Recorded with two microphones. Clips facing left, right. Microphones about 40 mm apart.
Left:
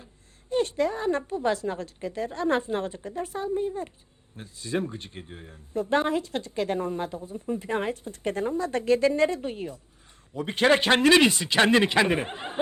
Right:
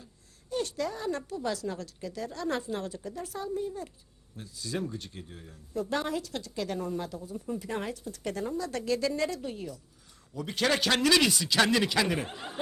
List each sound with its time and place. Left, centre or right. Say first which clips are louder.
0.5 s speech: left 7 dB; left